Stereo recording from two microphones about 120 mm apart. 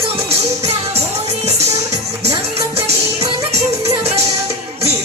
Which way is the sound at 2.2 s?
55° right (ahead or behind).